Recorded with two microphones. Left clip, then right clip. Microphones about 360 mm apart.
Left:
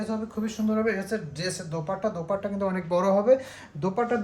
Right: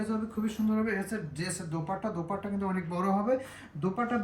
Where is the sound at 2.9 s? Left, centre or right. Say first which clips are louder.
Left 9 dB; left.